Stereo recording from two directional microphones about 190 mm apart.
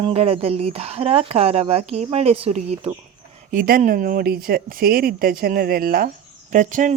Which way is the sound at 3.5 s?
45° right (ahead or behind).